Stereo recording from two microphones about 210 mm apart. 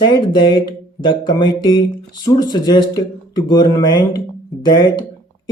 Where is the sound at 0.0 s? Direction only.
20° left (ahead or behind).